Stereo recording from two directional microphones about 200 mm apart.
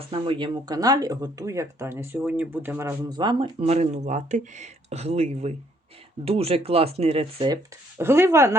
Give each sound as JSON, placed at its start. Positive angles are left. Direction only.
{"t": 0.1, "sound": "speech", "side_deg": -25}